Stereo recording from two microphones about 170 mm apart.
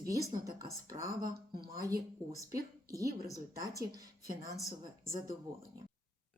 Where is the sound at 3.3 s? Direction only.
20° right (ahead or behind).